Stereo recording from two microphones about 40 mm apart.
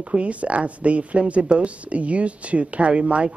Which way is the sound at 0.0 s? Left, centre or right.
Right.